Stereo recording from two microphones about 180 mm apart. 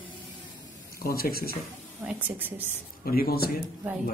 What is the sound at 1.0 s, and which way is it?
Speech, 55° left (ahead or behind).